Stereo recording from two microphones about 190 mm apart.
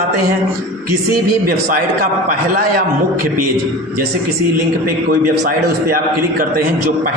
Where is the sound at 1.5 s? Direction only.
50° right (ahead or behind).